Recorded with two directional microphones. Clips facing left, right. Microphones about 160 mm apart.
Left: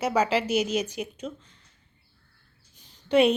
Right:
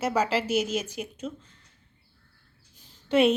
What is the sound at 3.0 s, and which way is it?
Speech, centre (ahead or behind).